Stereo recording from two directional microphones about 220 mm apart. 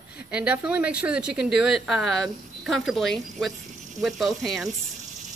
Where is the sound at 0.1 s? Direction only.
5° right (ahead or behind).